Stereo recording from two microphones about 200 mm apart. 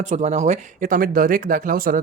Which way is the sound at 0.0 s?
35° right (ahead or behind).